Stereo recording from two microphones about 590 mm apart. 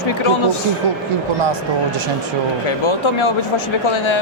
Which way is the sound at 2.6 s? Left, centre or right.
Left.